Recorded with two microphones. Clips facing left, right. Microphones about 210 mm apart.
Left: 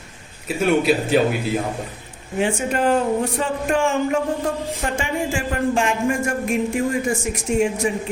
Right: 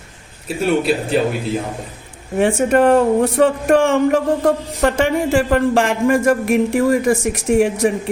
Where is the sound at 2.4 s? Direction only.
60° right (ahead or behind).